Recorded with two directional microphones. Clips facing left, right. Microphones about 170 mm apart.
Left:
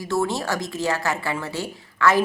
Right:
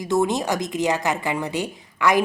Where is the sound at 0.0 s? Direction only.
20° right (ahead or behind).